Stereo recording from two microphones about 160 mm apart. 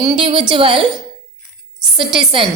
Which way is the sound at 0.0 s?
25° right (ahead or behind).